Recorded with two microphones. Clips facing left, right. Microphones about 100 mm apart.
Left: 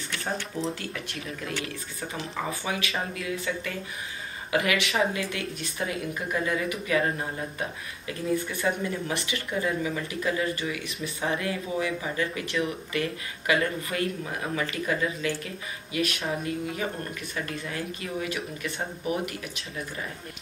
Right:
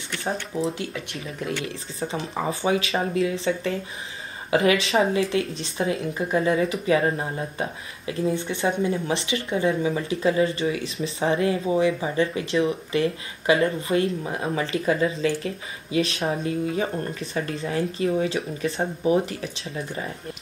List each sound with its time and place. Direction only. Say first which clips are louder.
1.6 s speech: right 5 dB; 30° right (ahead or behind)